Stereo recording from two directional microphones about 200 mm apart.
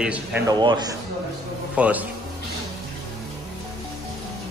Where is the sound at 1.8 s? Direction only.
5° right (ahead or behind).